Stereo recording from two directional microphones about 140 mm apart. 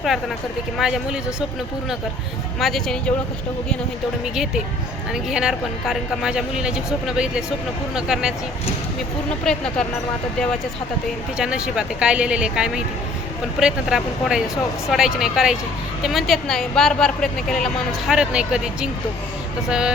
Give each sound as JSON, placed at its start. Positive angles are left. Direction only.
{"t": 0.8, "sound": "speech", "side_deg": -5}
{"t": 2.6, "sound": "speech", "side_deg": 0}
{"t": 5.1, "sound": "speech", "side_deg": -5}
{"t": 9.4, "sound": "speech", "side_deg": 5}
{"t": 11.3, "sound": "speech", "side_deg": -5}